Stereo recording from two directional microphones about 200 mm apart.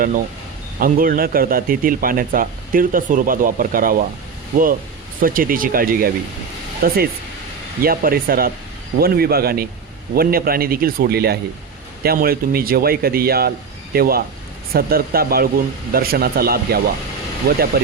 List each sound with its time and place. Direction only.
0.8 s a man's voice: 45° right (ahead or behind)
5.2 s a man's voice: 45° right (ahead or behind)